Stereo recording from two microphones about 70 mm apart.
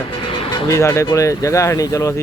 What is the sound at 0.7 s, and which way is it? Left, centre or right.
Speech, left.